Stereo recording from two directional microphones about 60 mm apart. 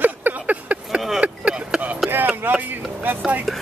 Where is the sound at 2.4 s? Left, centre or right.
Right.